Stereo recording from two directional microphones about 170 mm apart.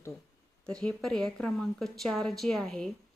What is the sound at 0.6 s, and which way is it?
A woman's voice, 5° left (ahead or behind).